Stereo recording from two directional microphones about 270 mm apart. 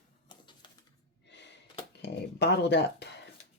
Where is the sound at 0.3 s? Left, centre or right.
Centre.